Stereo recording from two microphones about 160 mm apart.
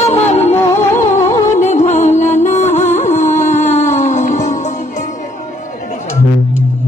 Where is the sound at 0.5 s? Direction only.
15° left (ahead or behind).